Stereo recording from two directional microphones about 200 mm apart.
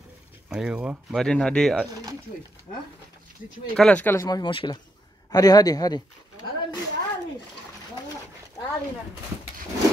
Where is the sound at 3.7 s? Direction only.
5° left (ahead or behind).